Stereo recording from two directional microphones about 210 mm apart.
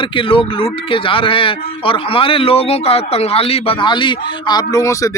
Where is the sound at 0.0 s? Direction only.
25° left (ahead or behind).